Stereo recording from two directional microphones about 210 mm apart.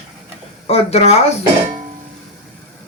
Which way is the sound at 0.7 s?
30° left (ahead or behind).